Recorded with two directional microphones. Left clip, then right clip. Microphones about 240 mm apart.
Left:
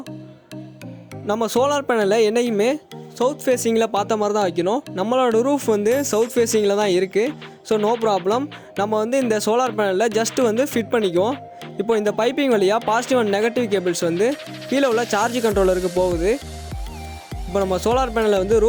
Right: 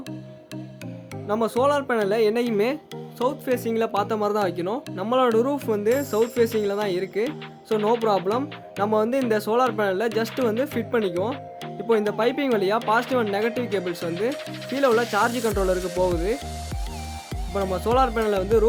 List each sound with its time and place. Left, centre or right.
1.3 s speech: left
17.5 s speech: left